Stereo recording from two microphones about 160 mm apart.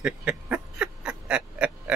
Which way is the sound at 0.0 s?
5° right (ahead or behind).